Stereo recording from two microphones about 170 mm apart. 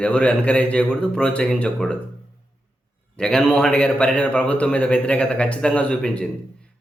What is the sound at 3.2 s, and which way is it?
A man's voice, 5° left (ahead or behind).